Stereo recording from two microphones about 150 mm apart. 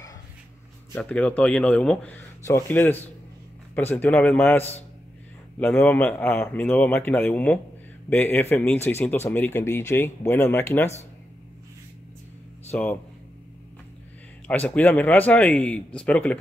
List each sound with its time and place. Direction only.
0.9 s speech: 10° left (ahead or behind)
12.7 s speech: 10° left (ahead or behind)
14.5 s speech: 10° left (ahead or behind)